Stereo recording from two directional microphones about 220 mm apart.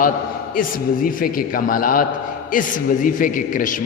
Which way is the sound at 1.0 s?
40° left (ahead or behind).